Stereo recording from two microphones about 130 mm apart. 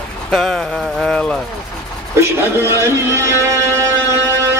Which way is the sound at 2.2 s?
20° right (ahead or behind).